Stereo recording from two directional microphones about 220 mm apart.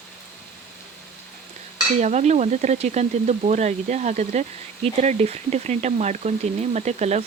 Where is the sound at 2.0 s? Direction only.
30° right (ahead or behind).